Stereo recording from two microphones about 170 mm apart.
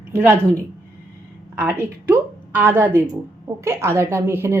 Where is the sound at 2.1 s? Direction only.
10° right (ahead or behind).